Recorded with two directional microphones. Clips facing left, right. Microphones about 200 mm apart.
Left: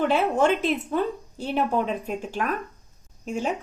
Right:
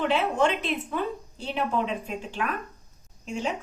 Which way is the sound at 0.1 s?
45° left (ahead or behind).